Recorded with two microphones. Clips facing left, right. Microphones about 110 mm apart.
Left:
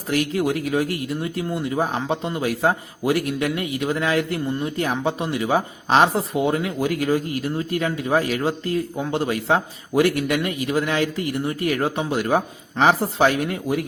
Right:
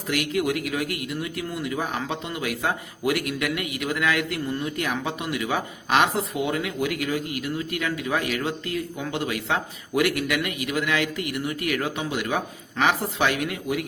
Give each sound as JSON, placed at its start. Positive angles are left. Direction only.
{"t": 0.1, "sound": "speech", "side_deg": 35}